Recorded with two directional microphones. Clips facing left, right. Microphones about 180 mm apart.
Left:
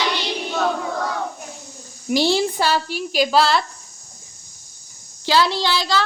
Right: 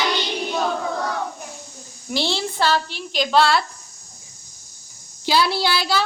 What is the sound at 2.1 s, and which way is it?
A woman's voice, 15° left (ahead or behind).